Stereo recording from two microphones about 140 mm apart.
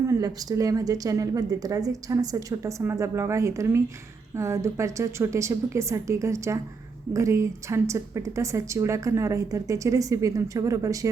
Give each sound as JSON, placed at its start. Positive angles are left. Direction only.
{"t": 0.1, "sound": "a woman's voice", "side_deg": -25}